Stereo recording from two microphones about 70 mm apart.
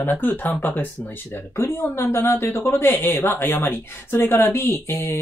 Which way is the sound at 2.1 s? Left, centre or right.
Left.